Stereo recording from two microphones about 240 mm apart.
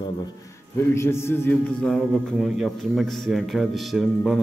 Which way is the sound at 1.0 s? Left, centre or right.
Centre.